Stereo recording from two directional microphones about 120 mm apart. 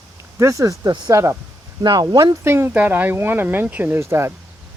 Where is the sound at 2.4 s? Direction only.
20° right (ahead or behind).